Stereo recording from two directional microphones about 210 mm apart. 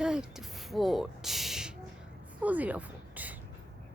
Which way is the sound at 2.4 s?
5° right (ahead or behind).